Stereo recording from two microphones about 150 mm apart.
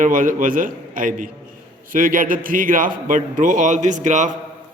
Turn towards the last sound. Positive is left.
turn(degrees=-55)  # may be behind; listen again after turning